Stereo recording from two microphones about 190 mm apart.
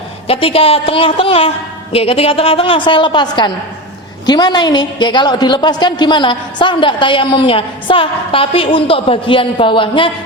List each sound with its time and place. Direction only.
0.3 s a woman's voice: 30° left (ahead or behind)